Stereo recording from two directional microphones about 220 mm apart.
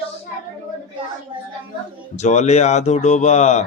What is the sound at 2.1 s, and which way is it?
Speech, 30° left (ahead or behind).